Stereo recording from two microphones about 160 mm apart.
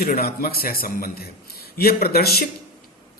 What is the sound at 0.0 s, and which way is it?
A man's voice, 65° left (ahead or behind).